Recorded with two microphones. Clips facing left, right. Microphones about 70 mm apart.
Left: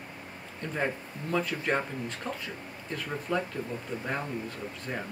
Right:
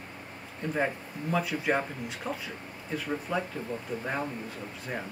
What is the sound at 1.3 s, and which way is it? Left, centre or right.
Speech, centre.